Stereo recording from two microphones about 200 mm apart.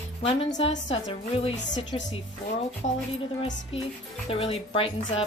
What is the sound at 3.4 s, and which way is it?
Speech, 30° left (ahead or behind).